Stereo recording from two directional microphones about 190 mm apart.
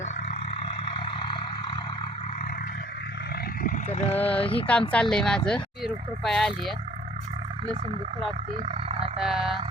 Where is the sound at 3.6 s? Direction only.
40° left (ahead or behind).